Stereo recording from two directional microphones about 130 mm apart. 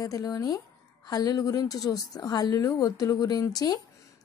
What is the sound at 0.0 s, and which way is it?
Speech, 25° left (ahead or behind).